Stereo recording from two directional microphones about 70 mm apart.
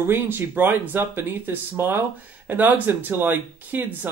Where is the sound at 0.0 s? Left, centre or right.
Right.